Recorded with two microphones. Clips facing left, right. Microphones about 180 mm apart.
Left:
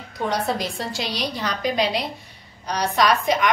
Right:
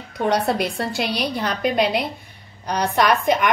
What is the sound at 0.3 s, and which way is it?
A woman's voice, 60° right (ahead or behind).